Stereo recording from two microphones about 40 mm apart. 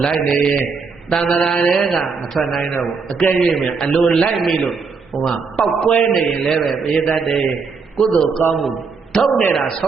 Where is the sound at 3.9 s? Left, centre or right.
Centre.